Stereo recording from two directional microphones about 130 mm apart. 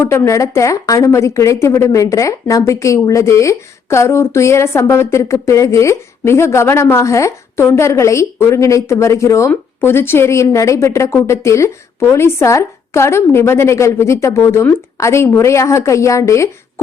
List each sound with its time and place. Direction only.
0.0 s speech: 20° left (ahead or behind)